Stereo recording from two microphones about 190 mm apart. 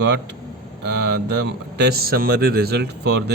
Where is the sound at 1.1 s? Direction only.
60° right (ahead or behind).